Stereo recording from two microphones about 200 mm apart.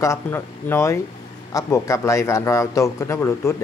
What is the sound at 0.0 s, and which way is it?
A man's voice, 15° left (ahead or behind).